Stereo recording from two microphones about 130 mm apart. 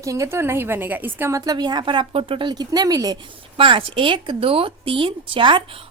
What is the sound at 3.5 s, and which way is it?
A woman's voice, 45° right (ahead or behind).